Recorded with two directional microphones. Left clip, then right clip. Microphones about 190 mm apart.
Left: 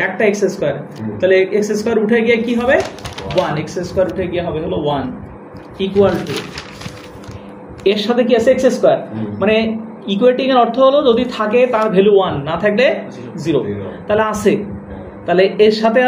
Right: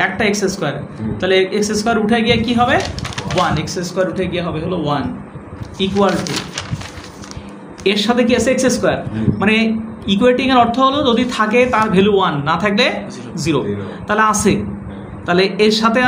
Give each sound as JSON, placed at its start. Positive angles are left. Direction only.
{"t": 0.0, "sound": "speech", "side_deg": -45}
{"t": 5.8, "sound": "speech", "side_deg": -60}
{"t": 7.8, "sound": "speech", "side_deg": -60}